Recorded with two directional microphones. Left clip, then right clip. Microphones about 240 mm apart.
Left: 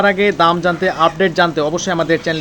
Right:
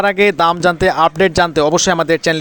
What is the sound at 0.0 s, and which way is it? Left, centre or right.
Speech, right.